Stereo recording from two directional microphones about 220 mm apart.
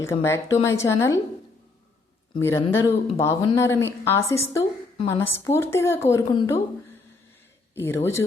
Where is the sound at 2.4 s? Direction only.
10° left (ahead or behind).